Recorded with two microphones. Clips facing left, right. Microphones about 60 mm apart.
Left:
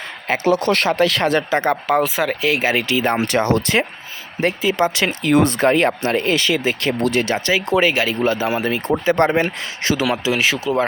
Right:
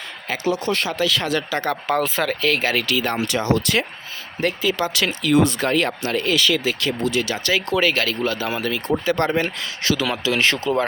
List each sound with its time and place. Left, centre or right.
0.3 s speech: left
1.4 s speech: left
2.0 s speech: centre; by 3.2 s left
3.2 s speech: left
4.4 s speech: left
5.3 s speech: left
7.5 s speech: left
10.1 s speech: centre